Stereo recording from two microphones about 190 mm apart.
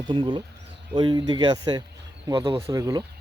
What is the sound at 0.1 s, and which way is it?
Speech, 25° right (ahead or behind).